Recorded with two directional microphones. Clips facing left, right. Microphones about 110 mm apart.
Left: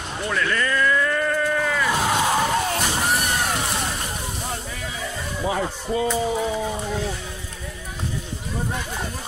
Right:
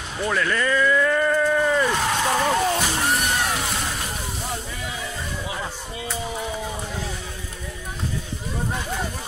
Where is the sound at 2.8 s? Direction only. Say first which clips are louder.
Even; centre (ahead or behind).